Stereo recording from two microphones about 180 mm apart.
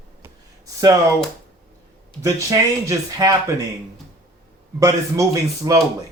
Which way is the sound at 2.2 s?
20° right (ahead or behind).